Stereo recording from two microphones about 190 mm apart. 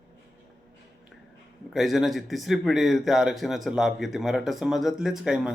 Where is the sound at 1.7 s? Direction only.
Centre (ahead or behind).